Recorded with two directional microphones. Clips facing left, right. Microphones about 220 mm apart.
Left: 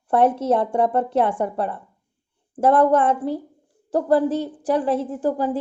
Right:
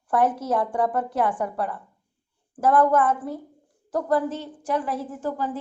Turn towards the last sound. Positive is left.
turn(degrees=30)  # may be behind; listen again after turning